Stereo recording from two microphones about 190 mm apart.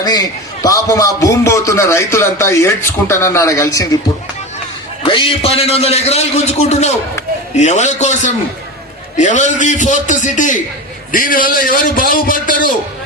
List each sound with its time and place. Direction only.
0.0 s a man's voice: 20° left (ahead or behind)
5.0 s a man's voice: 25° left (ahead or behind); by 12.7 s 45° left (ahead or behind)